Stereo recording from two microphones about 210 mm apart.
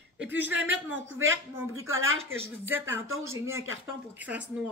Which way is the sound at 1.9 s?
75° right (ahead or behind).